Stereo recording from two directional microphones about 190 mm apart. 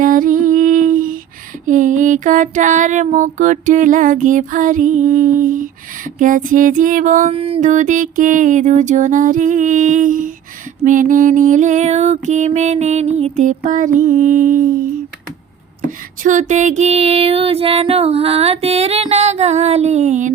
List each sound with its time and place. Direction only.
0.0 s music: 45° right (ahead or behind)
1.6 s female singing: 40° right (ahead or behind)
7.3 s music: 30° right (ahead or behind)
16.2 s music: 40° right (ahead or behind)